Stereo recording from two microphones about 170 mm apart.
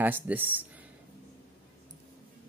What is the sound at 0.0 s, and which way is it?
Speech, 10° right (ahead or behind).